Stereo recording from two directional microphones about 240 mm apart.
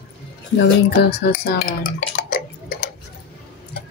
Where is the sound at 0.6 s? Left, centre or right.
Left.